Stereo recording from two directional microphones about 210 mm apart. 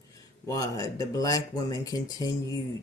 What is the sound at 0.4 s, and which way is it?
Speech, 15° left (ahead or behind).